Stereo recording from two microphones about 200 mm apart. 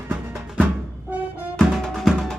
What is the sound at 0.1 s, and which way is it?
Music, 5° right (ahead or behind).